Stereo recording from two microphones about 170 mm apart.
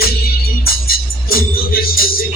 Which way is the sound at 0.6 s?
60° left (ahead or behind).